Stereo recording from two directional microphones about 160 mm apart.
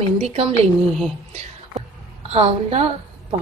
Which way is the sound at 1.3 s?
40° right (ahead or behind).